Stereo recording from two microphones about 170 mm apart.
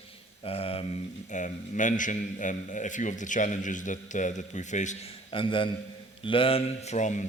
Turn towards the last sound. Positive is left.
turn(degrees=45)  # may be behind; listen again after turning